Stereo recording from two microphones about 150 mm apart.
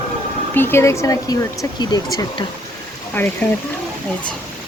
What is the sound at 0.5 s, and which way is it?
Speech, 15° left (ahead or behind).